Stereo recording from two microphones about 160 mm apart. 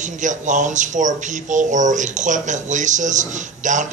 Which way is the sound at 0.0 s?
50° right (ahead or behind).